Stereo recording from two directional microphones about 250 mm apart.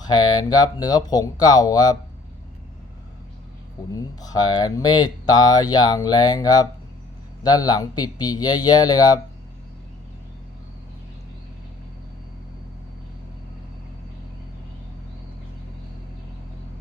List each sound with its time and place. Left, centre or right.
0.0 s speech: centre
3.9 s speech: centre